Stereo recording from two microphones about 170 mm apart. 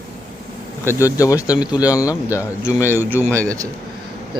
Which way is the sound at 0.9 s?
20° left (ahead or behind).